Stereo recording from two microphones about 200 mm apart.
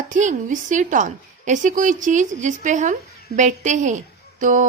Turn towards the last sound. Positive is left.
turn(degrees=-40)  # may be behind; listen again after turning